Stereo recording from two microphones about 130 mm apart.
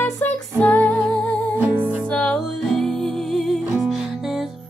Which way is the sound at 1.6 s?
10° right (ahead or behind).